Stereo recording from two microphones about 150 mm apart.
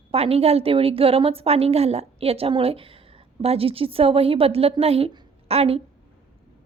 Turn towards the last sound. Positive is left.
turn(degrees=-40)  # may be behind; listen again after turning